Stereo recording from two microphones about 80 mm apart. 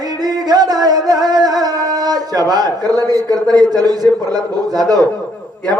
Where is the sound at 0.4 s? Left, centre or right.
Right.